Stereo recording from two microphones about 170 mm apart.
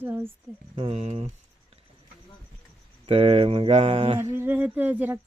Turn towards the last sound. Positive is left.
turn(degrees=-10)  # may be behind; listen again after turning